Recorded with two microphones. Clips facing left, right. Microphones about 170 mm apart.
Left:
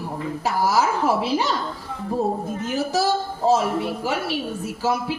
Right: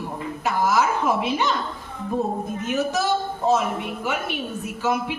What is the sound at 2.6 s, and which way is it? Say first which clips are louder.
A man's voice: even; 35° left (ahead or behind).